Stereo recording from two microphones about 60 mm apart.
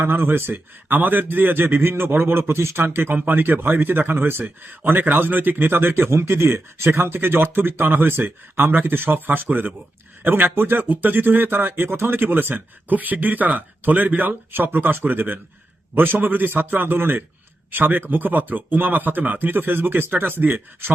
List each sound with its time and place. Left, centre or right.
0.0 s a man's voice: right